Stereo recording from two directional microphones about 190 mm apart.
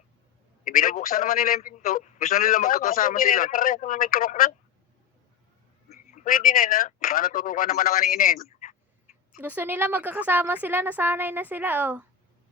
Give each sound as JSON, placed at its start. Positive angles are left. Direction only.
{"t": 0.6, "sound": "a man's voice", "side_deg": 45}
{"t": 6.1, "sound": "a man's voice", "side_deg": 45}
{"t": 8.4, "sound": "a sound", "side_deg": 40}
{"t": 9.3, "sound": "a woman's voice", "side_deg": -10}